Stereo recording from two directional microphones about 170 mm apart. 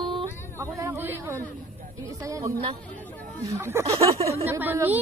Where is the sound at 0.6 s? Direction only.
15° right (ahead or behind).